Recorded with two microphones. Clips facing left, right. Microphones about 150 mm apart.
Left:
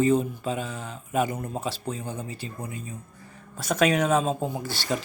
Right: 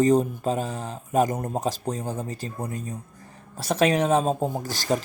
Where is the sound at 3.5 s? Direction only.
30° right (ahead or behind).